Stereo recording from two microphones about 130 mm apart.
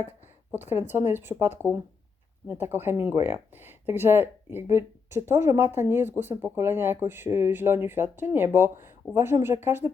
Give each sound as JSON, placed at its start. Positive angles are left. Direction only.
{"t": 0.7, "sound": "speech", "side_deg": -15}